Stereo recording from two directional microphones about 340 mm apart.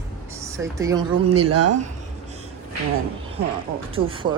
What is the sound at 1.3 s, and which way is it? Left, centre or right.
Speech, right.